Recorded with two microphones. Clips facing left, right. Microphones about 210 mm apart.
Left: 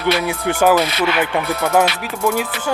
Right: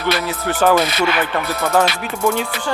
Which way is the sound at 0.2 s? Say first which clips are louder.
Left 1 dB; 15° left (ahead or behind).